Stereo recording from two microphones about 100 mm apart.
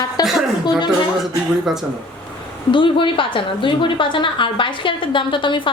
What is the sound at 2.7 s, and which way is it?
A woman's voice, 55° left (ahead or behind).